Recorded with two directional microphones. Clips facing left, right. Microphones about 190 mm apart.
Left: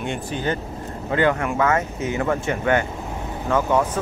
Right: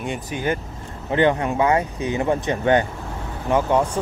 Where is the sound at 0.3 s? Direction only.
15° right (ahead or behind).